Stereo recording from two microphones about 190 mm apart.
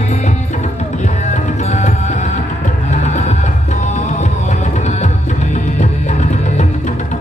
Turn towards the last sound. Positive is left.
turn(degrees=40)  # may be behind; listen again after turning